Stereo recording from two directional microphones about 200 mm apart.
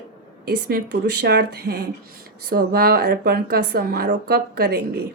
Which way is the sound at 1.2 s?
55° right (ahead or behind).